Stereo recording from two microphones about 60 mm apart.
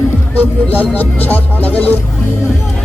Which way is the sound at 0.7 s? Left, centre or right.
Left.